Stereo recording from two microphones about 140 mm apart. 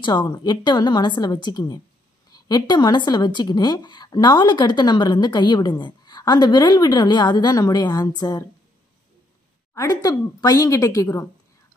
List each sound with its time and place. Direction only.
0.0 s a woman's voice: 30° left (ahead or behind)
9.8 s a woman's voice: 25° left (ahead or behind)